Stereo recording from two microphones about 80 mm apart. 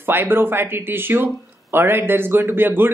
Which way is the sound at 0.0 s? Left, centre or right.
Right.